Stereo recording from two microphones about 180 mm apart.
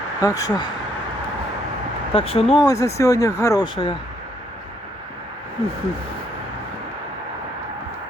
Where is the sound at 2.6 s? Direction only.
20° left (ahead or behind).